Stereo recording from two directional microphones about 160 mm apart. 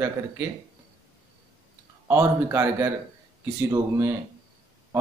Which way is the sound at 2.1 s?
15° right (ahead or behind).